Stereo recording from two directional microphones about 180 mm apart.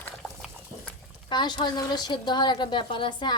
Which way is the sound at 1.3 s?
25° left (ahead or behind).